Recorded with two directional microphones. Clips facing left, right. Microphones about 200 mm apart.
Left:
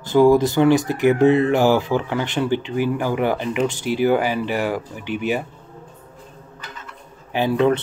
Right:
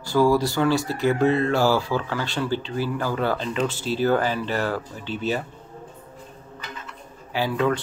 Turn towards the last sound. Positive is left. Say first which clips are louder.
# left 5 dB
turn(degrees=20)  # may be behind; listen again after turning